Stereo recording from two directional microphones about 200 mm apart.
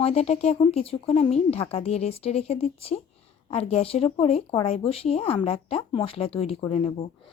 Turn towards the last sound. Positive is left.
turn(degrees=30)  # may be behind; listen again after turning